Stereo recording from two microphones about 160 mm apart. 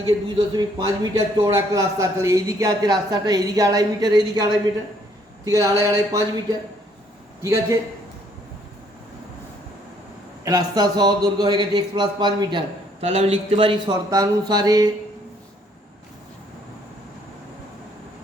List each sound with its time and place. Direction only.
0.5 s a man's voice: 25° right (ahead or behind)
10.4 s a man's voice: 20° right (ahead or behind)